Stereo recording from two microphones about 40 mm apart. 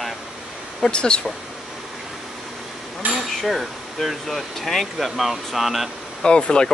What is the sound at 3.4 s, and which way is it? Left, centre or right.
Speech, centre.